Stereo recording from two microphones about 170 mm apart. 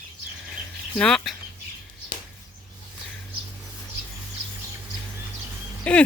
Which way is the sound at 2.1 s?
55° right (ahead or behind).